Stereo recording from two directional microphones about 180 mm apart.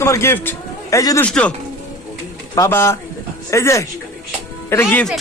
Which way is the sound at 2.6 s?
15° left (ahead or behind).